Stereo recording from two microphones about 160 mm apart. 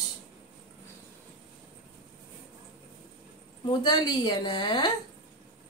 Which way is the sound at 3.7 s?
25° left (ahead or behind).